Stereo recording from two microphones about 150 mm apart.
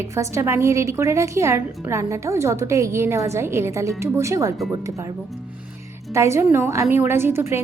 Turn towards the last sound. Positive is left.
turn(degrees=-15)  # may be behind; listen again after turning